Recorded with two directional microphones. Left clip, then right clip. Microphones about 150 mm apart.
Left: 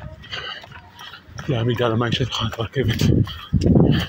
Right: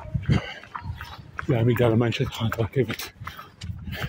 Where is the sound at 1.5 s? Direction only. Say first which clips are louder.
Left 1 dB; 40° right (ahead or behind).